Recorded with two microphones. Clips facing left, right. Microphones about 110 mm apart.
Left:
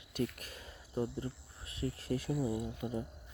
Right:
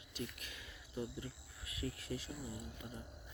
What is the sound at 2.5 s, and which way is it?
Speech, 90° left.